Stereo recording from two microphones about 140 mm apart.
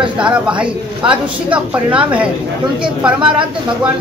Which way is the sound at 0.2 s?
10° right (ahead or behind).